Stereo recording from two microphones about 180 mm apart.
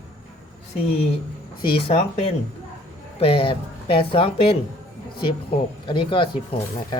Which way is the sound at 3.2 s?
30° left (ahead or behind).